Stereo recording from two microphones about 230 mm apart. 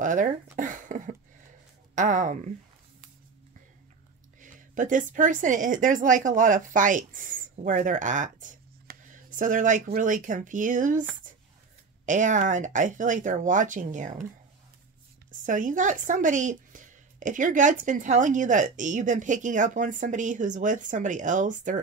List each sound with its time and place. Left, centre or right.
0.0 s speech: right
4.4 s a woman's voice: right
15.4 s speech: right